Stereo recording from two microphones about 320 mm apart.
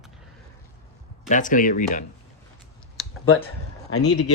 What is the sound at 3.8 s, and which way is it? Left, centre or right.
Speech, left.